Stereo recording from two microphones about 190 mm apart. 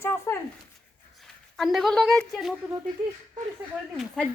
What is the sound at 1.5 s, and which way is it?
A woman's voice, centre (ahead or behind).